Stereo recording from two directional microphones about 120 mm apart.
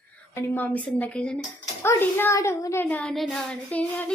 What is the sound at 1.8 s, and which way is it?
A child's voice, 20° left (ahead or behind).